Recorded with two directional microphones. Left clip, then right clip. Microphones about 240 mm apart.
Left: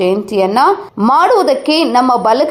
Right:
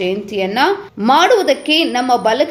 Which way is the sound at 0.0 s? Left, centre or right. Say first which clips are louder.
Left 6 dB; centre.